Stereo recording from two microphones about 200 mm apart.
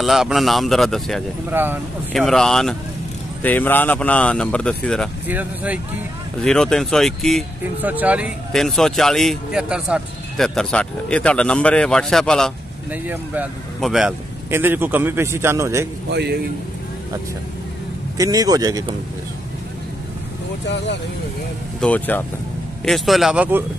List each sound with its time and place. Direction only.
0.0 s speech: centre (ahead or behind)
1.5 s speech: 10° right (ahead or behind)
2.1 s speech: centre (ahead or behind)
5.3 s speech: 10° right (ahead or behind)
6.4 s speech: 5° left (ahead or behind); by 15.9 s 15° right (ahead or behind)
16.1 s a man's voice: 55° right (ahead or behind)
18.1 s a man's voice: 20° right (ahead or behind)
20.6 s speech: 60° left (ahead or behind)
21.8 s speech: 10° left (ahead or behind)